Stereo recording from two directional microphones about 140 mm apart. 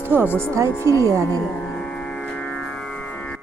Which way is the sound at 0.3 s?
20° right (ahead or behind).